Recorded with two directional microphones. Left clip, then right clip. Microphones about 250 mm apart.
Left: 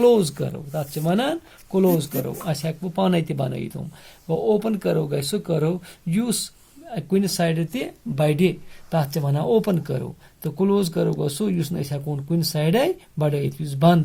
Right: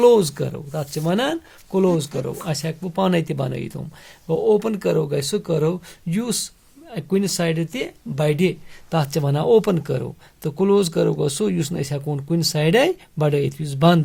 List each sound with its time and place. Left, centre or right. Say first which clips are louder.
0.0 s speech: right 3 dB; right